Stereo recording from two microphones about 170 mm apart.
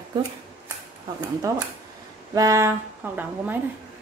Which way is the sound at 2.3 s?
20° right (ahead or behind).